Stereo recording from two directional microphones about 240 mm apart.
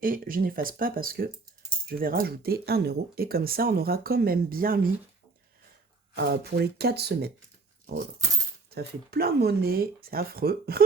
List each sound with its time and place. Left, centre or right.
0.0 s speech: right
6.1 s speech: right
8.7 s speech: right